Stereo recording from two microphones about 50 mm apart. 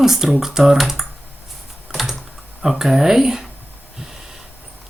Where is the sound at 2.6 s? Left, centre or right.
Centre.